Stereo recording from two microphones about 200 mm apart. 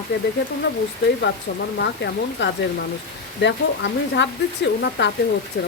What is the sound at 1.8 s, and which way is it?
Speech, 60° left (ahead or behind).